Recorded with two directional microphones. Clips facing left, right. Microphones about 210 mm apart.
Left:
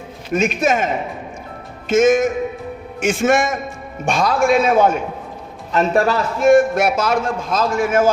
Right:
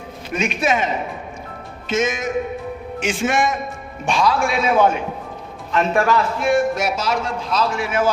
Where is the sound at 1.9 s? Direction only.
50° left (ahead or behind).